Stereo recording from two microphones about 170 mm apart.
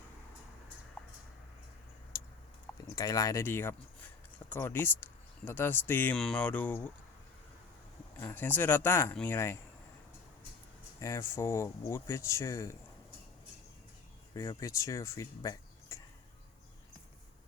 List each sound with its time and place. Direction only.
1.0 s a sound: 10° left (ahead or behind)
2.1 s a sound: 20° left (ahead or behind)
2.9 s speech: 20° left (ahead or behind)
8.1 s speech: 10° left (ahead or behind)
11.0 s speech: 15° left (ahead or behind)
14.3 s speech: 20° left (ahead or behind)